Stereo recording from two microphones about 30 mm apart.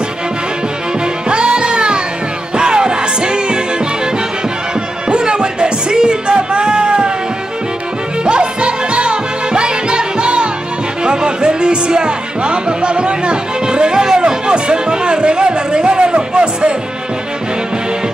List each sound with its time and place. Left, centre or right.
1.3 s music: right
5.1 s music: right
8.3 s music: right